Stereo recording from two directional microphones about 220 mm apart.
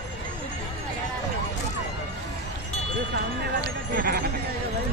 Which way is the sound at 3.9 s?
40° right (ahead or behind).